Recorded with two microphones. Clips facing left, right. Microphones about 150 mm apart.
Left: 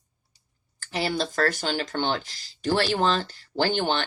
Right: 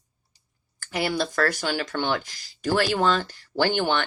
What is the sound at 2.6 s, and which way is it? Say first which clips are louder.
Speech: right 1 dB; 30° left (ahead or behind).